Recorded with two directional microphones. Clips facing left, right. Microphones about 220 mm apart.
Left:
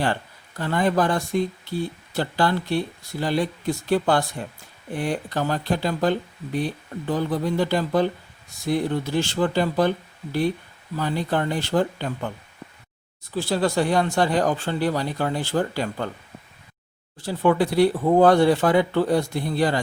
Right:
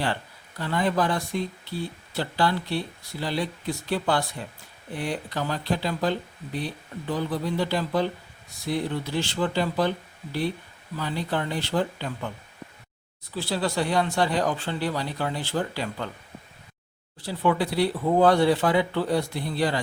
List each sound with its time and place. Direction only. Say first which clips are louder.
0.6 s speech: left 3 dB; 45° left (ahead or behind)
10.9 s speech: left 4 dB; 50° left (ahead or behind)
13.3 s speech: left 5 dB; 45° left (ahead or behind)
17.2 s speech: left 4 dB; 45° left (ahead or behind)